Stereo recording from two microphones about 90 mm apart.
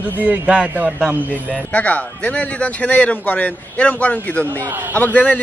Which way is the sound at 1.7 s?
15° left (ahead or behind).